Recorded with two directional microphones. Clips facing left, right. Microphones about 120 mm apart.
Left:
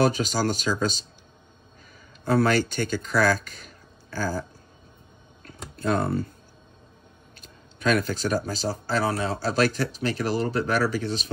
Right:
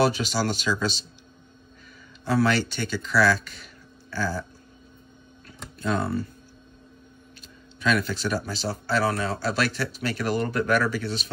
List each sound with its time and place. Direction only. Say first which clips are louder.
0.0 s speech: left 1 dB; 45° left (ahead or behind)
2.2 s speech: left 1 dB; 45° left (ahead or behind)
5.8 s speech: left 2 dB; 45° left (ahead or behind)
7.4 s speech: left 1 dB; 45° left (ahead or behind)